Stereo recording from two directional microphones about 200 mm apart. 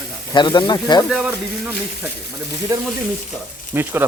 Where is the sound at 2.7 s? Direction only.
15° right (ahead or behind).